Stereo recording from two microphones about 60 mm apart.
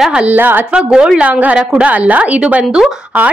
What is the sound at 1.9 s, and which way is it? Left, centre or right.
Speech, right.